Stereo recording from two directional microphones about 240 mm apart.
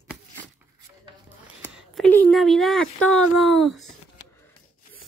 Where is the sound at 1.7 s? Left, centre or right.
Centre.